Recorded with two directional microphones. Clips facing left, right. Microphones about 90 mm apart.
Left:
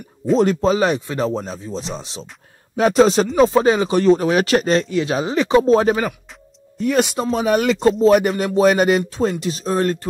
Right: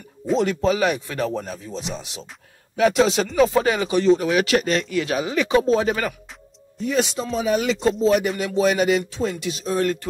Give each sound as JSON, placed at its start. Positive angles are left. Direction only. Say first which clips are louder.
{"t": 0.4, "sound": "speech", "louder": "left 3 dB", "side_deg": 35}
{"t": 3.3, "sound": "speech", "louder": "left 3 dB", "side_deg": 30}
{"t": 4.0, "sound": "speech", "louder": "left 1 dB", "side_deg": 40}
{"t": 6.8, "sound": "speech", "louder": "left 4 dB", "side_deg": 60}